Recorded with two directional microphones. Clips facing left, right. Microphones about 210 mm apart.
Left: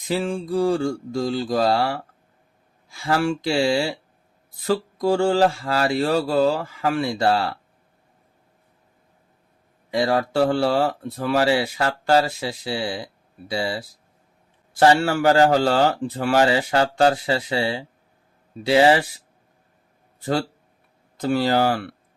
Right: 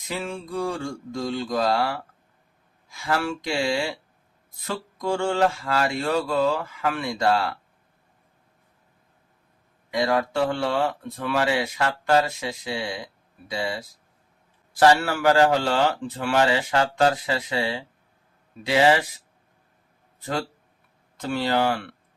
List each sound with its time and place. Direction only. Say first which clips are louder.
0.1 s a man's voice: left 7 dB; 30° left (ahead or behind)
9.9 s a man's voice: left 2 dB; 35° left (ahead or behind)
21.2 s a man's voice: left 4 dB; 35° left (ahead or behind)